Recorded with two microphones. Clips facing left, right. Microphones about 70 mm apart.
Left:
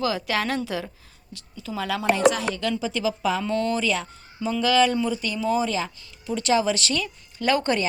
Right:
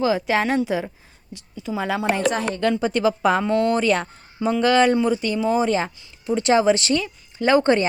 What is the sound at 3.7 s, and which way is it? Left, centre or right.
Speech, right.